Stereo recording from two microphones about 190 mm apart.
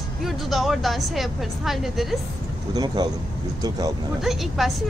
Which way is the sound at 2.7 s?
20° right (ahead or behind).